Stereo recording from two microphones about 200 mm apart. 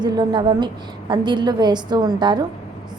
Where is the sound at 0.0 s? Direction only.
20° right (ahead or behind).